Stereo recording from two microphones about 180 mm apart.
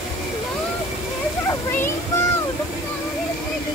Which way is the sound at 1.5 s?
15° left (ahead or behind).